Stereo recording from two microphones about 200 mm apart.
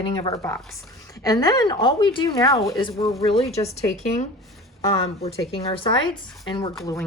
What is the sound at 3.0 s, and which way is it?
Speech, centre (ahead or behind).